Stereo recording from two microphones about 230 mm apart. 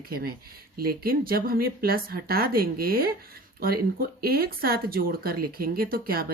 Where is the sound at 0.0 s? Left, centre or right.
Right.